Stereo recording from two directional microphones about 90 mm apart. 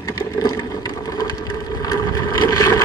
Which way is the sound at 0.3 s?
40° left (ahead or behind).